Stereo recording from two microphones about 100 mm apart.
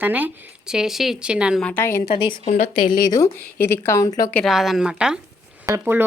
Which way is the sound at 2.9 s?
40° left (ahead or behind).